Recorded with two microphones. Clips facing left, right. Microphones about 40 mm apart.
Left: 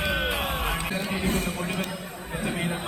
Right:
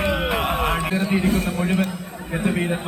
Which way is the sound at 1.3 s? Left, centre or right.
Right.